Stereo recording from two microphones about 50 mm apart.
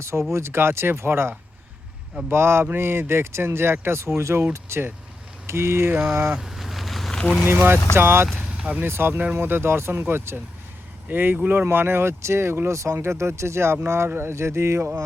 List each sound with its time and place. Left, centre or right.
0.0 s speech: right
4.2 s speech: right
6.2 s vehicle: centre
7.4 s speech: right
8.5 s a sound: right
8.8 s speech: right